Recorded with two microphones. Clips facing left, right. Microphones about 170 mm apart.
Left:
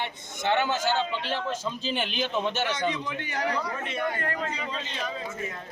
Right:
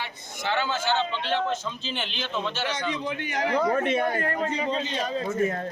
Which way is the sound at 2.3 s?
15° left (ahead or behind).